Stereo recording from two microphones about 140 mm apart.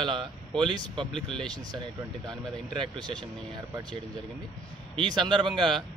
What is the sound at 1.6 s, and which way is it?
Speech, 30° right (ahead or behind).